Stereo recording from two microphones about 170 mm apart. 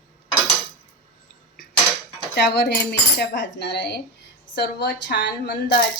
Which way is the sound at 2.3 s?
80° left.